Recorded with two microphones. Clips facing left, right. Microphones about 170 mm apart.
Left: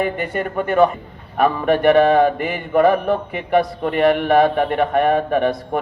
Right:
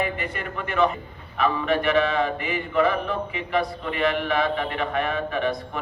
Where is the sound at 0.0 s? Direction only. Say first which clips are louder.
Left 7 dB; 45° left (ahead or behind).